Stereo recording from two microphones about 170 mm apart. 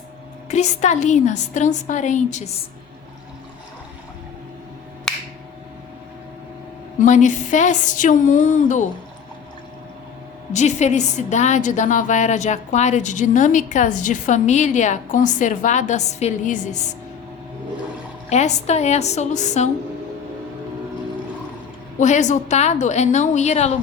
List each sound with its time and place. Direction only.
0.4 s a woman's voice: 40° left (ahead or behind)
5.1 s finger snapping: centre (ahead or behind)
7.0 s a woman's voice: 45° left (ahead or behind)
10.5 s a woman's voice: 45° left (ahead or behind)
18.3 s a woman's voice: 40° left (ahead or behind)
21.9 s a woman's voice: 45° left (ahead or behind)